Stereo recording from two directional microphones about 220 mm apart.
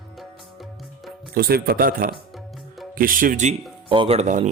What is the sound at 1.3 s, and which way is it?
Speech, 45° right (ahead or behind).